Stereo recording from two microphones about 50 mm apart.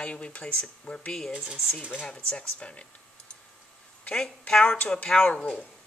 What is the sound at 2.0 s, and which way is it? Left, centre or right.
Speech, centre.